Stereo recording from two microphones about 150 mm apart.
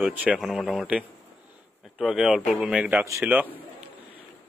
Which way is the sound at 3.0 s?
20° right (ahead or behind).